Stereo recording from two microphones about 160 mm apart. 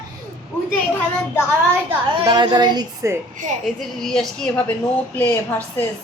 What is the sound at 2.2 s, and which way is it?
Speech, 30° right (ahead or behind).